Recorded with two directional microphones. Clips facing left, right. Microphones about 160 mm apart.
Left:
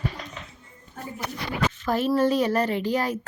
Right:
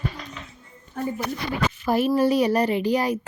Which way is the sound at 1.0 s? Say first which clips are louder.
Right 10 dB; 65° right (ahead or behind).